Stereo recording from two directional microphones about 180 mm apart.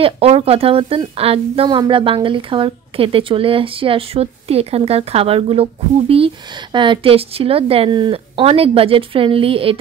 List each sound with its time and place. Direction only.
0.0 s speech: 35° right (ahead or behind)